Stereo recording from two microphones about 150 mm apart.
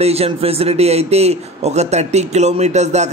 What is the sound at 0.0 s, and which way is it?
Speech, 45° right (ahead or behind).